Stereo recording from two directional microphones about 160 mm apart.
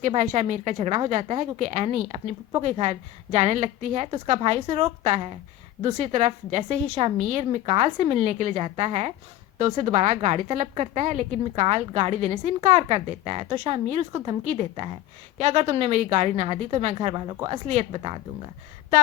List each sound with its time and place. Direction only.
0.0 s a woman's voice: 50° right (ahead or behind)